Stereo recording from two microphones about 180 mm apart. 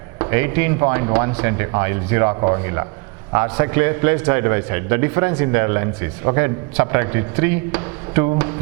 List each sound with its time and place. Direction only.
0.2 s a man's voice: 15° right (ahead or behind)
2.3 s speech: 30° right (ahead or behind)
3.3 s a man's voice: 15° right (ahead or behind)